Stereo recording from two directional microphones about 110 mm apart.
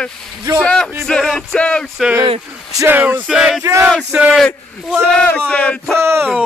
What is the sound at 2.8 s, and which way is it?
Speech, 15° right (ahead or behind).